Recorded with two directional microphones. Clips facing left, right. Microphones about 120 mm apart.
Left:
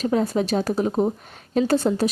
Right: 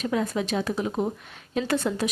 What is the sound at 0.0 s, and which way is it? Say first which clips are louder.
Speech: left 5 dB; 35° left (ahead or behind).